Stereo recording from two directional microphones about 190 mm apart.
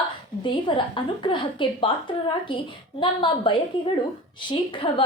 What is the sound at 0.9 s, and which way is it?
A woman's voice, 25° left (ahead or behind).